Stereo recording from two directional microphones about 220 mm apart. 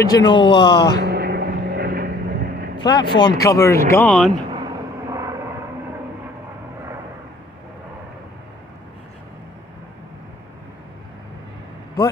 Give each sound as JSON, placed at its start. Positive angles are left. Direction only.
{"t": 0.1, "sound": "speech", "side_deg": 20}
{"t": 1.0, "sound": "vehicle", "side_deg": -45}
{"t": 2.8, "sound": "speech", "side_deg": 20}
{"t": 5.1, "sound": "vehicle", "side_deg": -15}